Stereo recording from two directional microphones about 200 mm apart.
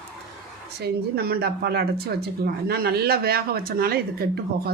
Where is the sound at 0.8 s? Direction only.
50° right (ahead or behind).